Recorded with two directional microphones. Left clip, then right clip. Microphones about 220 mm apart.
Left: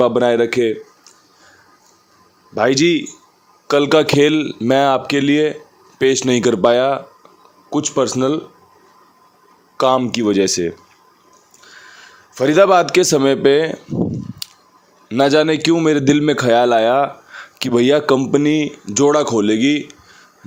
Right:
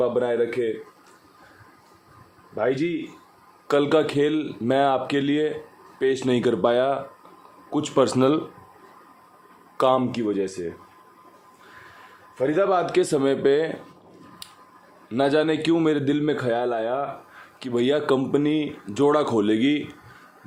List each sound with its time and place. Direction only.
0.0 s speech: 55° left (ahead or behind)
2.6 s speech: 55° left (ahead or behind)
3.7 s speech: 25° left (ahead or behind)
9.7 s speech: 20° left (ahead or behind)
10.1 s speech: 40° left (ahead or behind)
12.4 s a man's voice: 45° left (ahead or behind); by 13.7 s 30° left (ahead or behind)
15.1 s a man's voice: 30° left (ahead or behind); by 17.1 s 45° left (ahead or behind)
17.6 s speech: 35° left (ahead or behind)